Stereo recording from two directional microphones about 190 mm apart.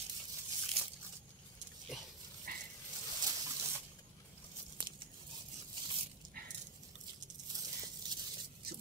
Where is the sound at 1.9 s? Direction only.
Centre (ahead or behind).